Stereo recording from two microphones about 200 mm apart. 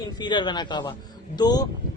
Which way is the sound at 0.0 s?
20° left (ahead or behind).